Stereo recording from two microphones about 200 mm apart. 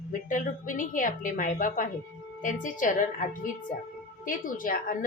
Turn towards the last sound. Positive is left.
turn(degrees=45)  # may be behind; listen again after turning